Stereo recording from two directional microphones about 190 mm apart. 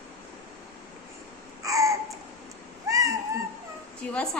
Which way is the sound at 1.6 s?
15° right (ahead or behind).